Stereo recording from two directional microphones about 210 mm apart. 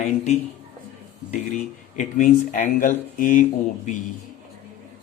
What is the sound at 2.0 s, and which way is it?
Speech, 35° left (ahead or behind).